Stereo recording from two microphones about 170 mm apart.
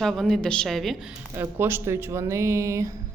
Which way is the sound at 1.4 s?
15° right (ahead or behind).